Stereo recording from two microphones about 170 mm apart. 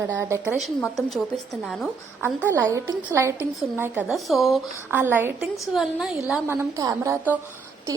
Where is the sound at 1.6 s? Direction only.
Centre (ahead or behind).